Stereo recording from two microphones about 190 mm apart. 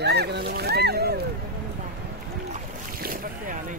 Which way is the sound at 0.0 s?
60° right (ahead or behind).